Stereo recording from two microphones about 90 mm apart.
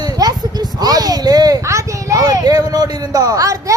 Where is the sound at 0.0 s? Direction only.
45° right (ahead or behind).